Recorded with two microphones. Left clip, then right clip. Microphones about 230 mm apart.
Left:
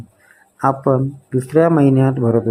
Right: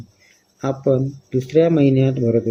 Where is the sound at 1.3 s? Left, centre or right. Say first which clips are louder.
Even; left.